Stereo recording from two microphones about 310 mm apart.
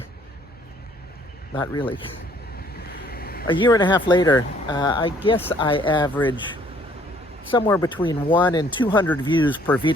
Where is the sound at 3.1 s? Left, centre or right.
Left.